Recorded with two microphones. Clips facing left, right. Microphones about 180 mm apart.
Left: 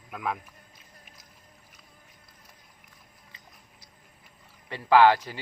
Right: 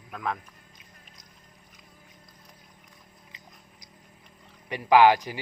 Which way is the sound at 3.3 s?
15° right (ahead or behind).